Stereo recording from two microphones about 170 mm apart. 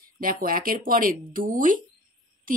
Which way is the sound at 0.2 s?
60° right (ahead or behind).